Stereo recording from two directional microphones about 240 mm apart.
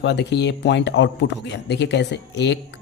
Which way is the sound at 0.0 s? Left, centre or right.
Left.